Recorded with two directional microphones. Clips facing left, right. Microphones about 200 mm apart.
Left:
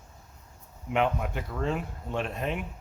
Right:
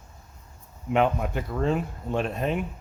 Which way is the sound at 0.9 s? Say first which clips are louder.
Right 4 dB; 40° right (ahead or behind).